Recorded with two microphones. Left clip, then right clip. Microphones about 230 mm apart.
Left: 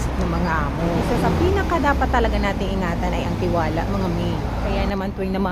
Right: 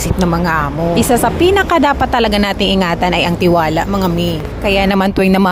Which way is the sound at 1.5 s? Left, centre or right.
Right.